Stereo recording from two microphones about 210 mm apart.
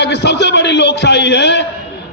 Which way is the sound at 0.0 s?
55° left (ahead or behind).